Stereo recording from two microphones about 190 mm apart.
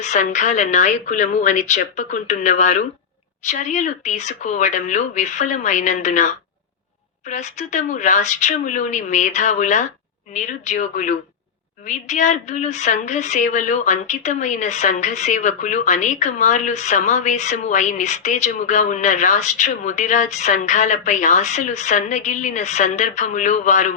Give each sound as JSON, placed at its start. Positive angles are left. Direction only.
{"t": 0.0, "sound": "a woman's voice", "side_deg": 40}